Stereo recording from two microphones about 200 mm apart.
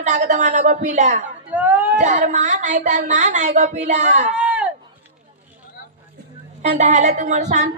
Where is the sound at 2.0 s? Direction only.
35° right (ahead or behind).